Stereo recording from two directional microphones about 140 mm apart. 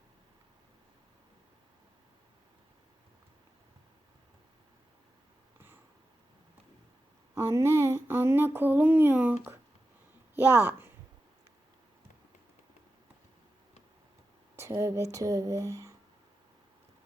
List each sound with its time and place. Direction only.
7.3 s a woman's voice: 20° right (ahead or behind)
14.5 s speech: 20° right (ahead or behind)